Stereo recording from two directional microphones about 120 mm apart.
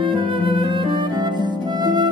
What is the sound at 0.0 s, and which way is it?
Harp, 45° right (ahead or behind).